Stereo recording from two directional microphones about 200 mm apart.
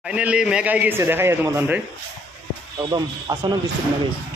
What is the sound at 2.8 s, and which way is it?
Speech, 20° right (ahead or behind).